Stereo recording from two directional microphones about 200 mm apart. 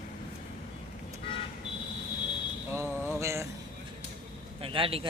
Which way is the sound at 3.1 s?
15° right (ahead or behind).